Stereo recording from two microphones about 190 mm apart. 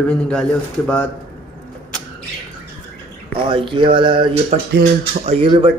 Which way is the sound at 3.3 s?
25° right (ahead or behind).